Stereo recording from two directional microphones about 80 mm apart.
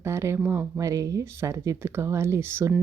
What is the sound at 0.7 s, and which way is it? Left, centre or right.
Speech, right.